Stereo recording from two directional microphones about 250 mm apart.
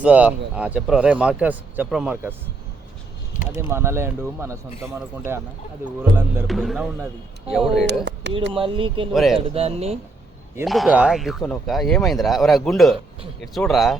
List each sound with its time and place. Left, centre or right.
0.0 s speech: centre
3.5 s speech: centre
8.5 s speech: right
9.1 s speech: centre
9.4 s speech: right
10.7 s speech: centre